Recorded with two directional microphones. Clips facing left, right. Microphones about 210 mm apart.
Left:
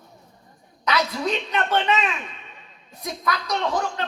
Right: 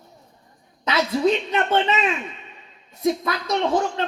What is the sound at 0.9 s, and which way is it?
Speech, 25° right (ahead or behind).